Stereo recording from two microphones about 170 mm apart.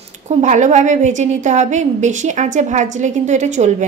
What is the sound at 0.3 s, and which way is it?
A woman's voice, 45° right (ahead or behind).